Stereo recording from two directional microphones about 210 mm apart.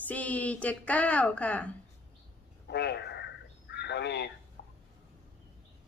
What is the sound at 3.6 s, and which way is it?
Crow, 55° left (ahead or behind).